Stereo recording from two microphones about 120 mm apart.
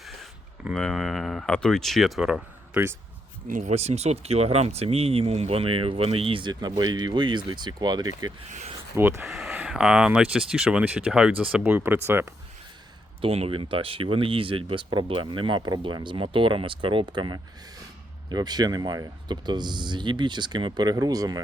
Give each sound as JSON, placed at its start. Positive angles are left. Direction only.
{"t": 0.0, "sound": "a sound", "side_deg": 0}
{"t": 0.7, "sound": "speech", "side_deg": 5}
{"t": 3.5, "sound": "speech", "side_deg": -80}
{"t": 8.4, "sound": "speech", "side_deg": -85}
{"t": 9.2, "sound": "speech", "side_deg": -5}
{"t": 13.2, "sound": "speech", "side_deg": -55}